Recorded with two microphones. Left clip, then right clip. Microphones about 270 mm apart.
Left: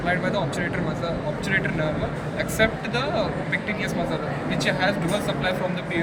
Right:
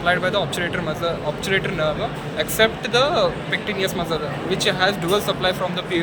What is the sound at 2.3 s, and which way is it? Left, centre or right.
Speech, centre.